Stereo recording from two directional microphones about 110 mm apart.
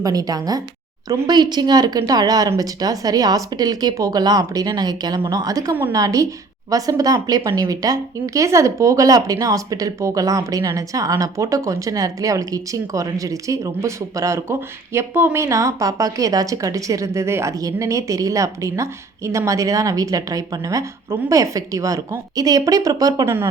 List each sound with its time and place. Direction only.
0.0 s a woman's voice: 35° right (ahead or behind)